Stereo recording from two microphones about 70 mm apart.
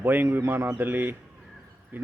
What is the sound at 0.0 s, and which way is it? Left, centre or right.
A man's voice, right.